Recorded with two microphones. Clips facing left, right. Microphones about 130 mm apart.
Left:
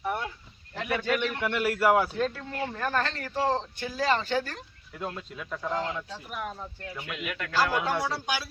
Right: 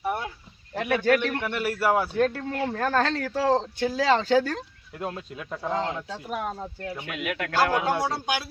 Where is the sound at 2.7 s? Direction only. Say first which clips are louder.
Right 5 dB; 90° right.